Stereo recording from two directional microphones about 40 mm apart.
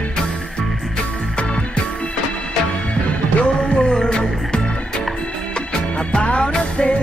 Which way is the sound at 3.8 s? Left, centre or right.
Centre.